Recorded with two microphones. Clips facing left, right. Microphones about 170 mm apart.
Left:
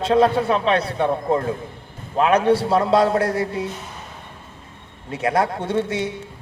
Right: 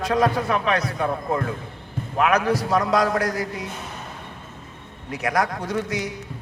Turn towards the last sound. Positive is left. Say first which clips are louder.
# left 4 dB
turn(degrees=25)  # may be behind; listen again after turning